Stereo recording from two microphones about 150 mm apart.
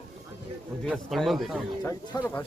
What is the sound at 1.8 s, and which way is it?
Speech, 20° left (ahead or behind).